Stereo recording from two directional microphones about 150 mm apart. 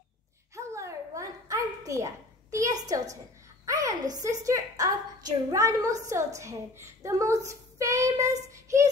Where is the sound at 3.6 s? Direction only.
25° right (ahead or behind).